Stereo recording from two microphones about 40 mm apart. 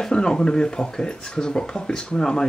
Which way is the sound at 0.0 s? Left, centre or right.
Centre.